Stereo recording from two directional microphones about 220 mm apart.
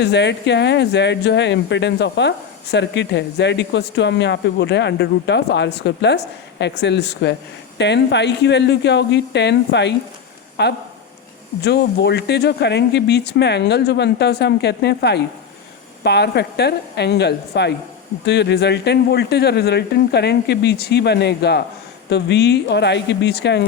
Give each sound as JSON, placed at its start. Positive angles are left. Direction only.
{"t": 0.0, "sound": "speech", "side_deg": 50}